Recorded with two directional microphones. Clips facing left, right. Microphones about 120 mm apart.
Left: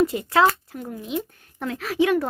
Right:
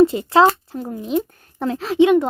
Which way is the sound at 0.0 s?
25° right (ahead or behind).